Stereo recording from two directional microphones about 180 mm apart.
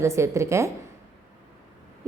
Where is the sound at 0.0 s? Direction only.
15° right (ahead or behind).